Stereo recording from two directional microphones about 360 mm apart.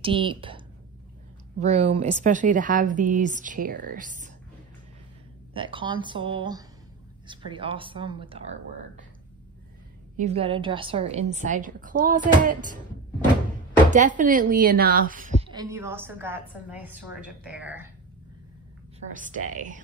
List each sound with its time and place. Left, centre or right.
0.0 s speech: centre
1.6 s speech: centre
5.5 s speech: centre
10.1 s speech: centre
13.8 s speech: right
15.5 s a woman's voice: centre
18.9 s speech: right